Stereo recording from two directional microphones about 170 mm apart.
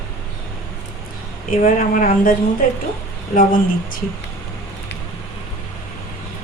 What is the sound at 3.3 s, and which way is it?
Speech, 55° left (ahead or behind).